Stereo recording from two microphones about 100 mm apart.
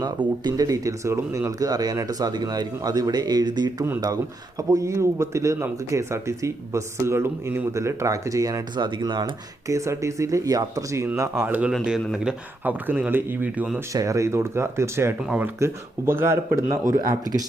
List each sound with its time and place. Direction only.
0.4 s speech: 35° right (ahead or behind)
8.7 s speech: 50° right (ahead or behind)
9.6 s speech: 30° right (ahead or behind)
11.4 s speech: 15° right (ahead or behind)
11.7 s a man's voice: 5° right (ahead or behind)
12.6 s speech: 15° right (ahead or behind)
13.9 s speech: 35° right (ahead or behind)
15.2 s speech: 10° right (ahead or behind)
15.5 s speech: 25° right (ahead or behind)